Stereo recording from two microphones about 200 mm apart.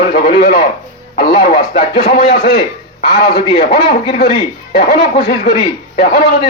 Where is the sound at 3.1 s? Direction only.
50° left (ahead or behind).